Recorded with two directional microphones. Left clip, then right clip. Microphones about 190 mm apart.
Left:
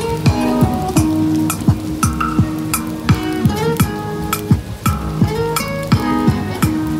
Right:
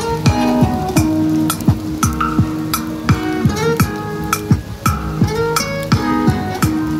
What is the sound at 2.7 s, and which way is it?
Music, 10° right (ahead or behind).